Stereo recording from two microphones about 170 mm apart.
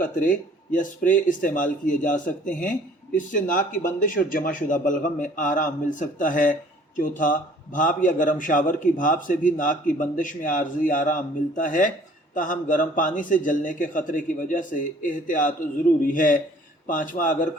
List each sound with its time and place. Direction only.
0.0 s speech: 50° left (ahead or behind)